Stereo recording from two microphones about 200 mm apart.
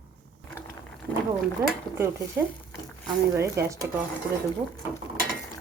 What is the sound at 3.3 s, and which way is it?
Speech, 15° right (ahead or behind).